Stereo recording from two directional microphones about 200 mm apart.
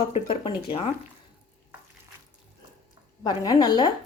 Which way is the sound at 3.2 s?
20° left (ahead or behind).